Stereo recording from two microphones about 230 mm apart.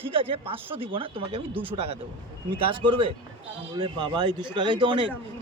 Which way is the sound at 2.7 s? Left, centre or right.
Right.